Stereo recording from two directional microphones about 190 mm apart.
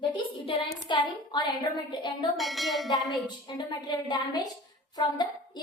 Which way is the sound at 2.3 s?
Centre (ahead or behind).